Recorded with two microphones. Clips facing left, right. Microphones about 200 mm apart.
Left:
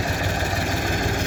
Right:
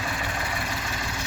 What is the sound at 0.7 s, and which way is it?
Vehicle, 45° left (ahead or behind).